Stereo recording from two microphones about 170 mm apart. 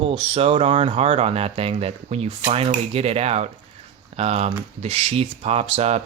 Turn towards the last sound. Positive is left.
turn(degrees=-40)  # may be behind; listen again after turning